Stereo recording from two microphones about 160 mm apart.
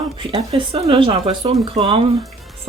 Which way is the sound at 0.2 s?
30° right (ahead or behind).